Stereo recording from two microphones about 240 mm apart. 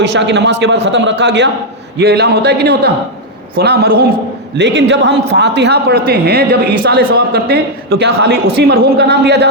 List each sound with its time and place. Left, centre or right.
0.0 s a man's voice: right